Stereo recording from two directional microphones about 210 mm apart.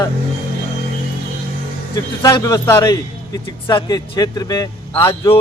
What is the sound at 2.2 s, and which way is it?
Speech, 15° left (ahead or behind).